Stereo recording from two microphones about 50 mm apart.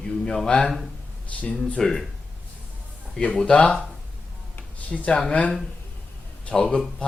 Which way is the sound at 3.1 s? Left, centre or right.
Centre.